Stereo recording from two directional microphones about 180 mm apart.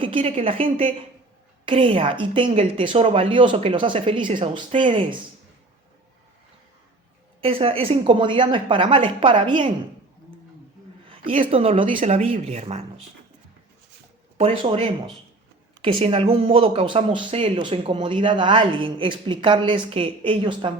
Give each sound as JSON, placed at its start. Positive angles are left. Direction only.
{"t": 0.0, "sound": "speech", "side_deg": -30}
{"t": 7.4, "sound": "speech", "side_deg": -30}
{"t": 11.3, "sound": "speech", "side_deg": -30}
{"t": 14.3, "sound": "speech", "side_deg": -30}